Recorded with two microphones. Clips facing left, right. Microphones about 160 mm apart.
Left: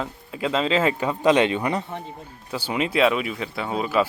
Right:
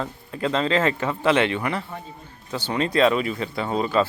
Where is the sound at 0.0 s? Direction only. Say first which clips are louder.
Right 1 dB; 10° left (ahead or behind).